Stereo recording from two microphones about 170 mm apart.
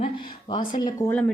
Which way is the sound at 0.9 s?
10° left (ahead or behind).